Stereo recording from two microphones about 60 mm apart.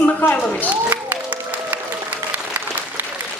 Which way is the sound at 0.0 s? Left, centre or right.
Left.